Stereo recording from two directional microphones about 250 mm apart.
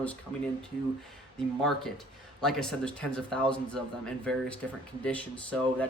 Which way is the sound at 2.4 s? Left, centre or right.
Centre.